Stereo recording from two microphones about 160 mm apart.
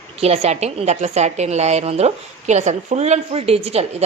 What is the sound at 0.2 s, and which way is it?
A woman's voice, 40° right (ahead or behind).